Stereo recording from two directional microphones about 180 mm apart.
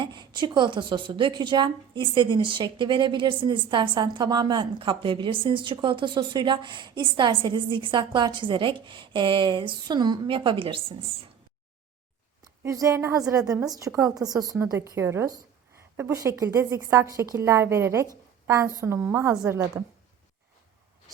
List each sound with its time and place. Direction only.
0.0 s a woman's voice: 25° right (ahead or behind)
12.6 s a woman's voice: 15° right (ahead or behind)